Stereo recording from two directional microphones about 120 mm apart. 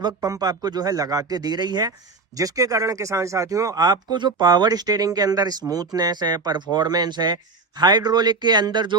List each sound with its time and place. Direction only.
0.0 s speech: 30° right (ahead or behind)